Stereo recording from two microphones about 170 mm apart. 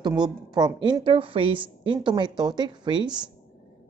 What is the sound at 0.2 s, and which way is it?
A woman's voice, 25° right (ahead or behind).